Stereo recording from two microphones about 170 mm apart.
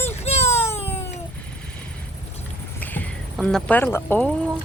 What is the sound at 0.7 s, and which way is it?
Cat, 40° left (ahead or behind).